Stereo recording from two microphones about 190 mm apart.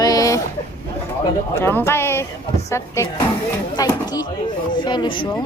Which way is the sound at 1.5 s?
10° left (ahead or behind).